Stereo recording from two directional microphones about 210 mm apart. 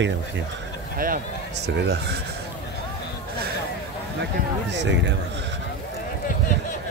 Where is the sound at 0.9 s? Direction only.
40° right (ahead or behind).